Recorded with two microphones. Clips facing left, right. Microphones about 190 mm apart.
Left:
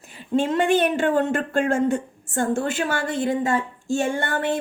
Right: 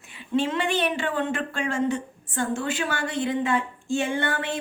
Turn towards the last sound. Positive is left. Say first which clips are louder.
# left 3 dB
turn(degrees=50)  # may be behind; listen again after turning